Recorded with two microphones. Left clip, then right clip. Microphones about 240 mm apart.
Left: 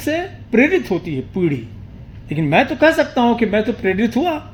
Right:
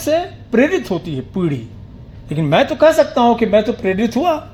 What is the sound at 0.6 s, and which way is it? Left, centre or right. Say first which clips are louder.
Speech: even; right.